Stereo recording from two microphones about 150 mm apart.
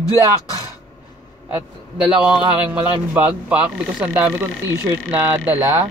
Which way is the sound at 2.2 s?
10° right (ahead or behind).